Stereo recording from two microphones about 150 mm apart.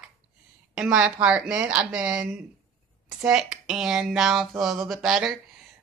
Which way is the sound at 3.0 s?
5° right (ahead or behind).